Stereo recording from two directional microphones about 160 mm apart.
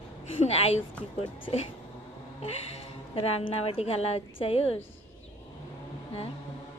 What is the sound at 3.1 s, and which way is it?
A woman's voice, 35° left (ahead or behind).